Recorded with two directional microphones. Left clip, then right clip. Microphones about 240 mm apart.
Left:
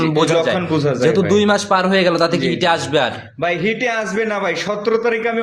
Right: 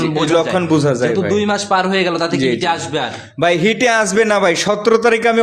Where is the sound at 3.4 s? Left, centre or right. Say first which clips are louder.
Right 5 dB; right.